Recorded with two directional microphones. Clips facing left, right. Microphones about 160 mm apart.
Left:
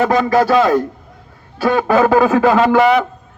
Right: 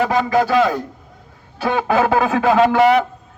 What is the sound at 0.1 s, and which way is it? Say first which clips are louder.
Speech: left 3 dB; 90° left.